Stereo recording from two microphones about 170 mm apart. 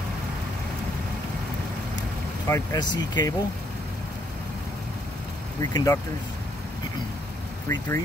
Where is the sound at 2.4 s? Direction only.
20° left (ahead or behind).